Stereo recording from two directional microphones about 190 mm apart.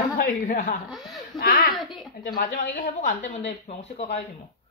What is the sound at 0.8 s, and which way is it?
Speech, centre (ahead or behind).